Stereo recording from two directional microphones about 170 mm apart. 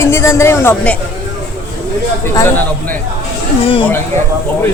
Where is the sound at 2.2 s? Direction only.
15° left (ahead or behind).